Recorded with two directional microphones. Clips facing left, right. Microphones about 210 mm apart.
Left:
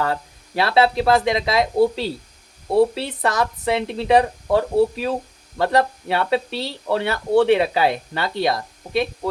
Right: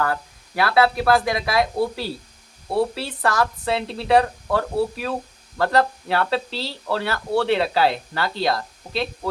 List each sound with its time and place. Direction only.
0.0 s speech: 25° left (ahead or behind)